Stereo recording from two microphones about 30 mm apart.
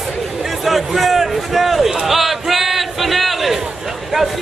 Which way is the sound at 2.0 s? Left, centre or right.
Centre.